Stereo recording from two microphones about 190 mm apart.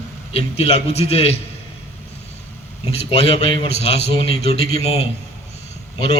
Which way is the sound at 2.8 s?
30° left (ahead or behind).